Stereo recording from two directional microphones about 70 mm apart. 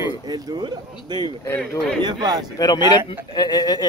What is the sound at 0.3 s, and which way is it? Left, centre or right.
Speech, right.